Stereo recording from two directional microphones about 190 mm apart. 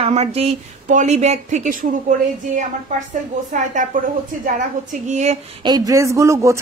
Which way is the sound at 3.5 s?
40° right (ahead or behind).